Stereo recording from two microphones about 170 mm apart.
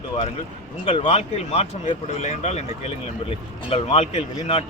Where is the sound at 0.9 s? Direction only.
35° left (ahead or behind).